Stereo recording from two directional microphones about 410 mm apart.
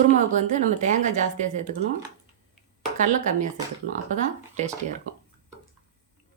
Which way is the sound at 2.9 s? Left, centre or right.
Centre.